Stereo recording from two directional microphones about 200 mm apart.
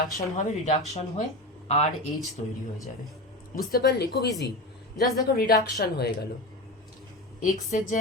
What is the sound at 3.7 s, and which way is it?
Speech, 50° left (ahead or behind).